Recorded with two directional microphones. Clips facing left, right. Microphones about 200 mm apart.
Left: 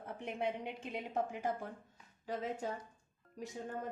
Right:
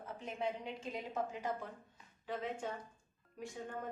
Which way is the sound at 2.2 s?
40° left (ahead or behind).